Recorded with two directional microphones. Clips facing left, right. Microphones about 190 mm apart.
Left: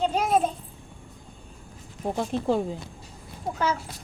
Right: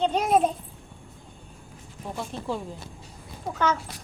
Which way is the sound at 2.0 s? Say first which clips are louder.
Left 7 dB; 45° left (ahead or behind).